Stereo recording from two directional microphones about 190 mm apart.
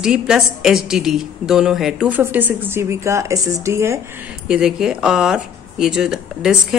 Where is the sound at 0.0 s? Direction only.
5° right (ahead or behind).